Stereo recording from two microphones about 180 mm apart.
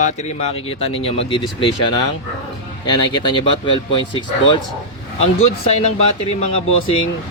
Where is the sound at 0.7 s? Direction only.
30° left (ahead or behind).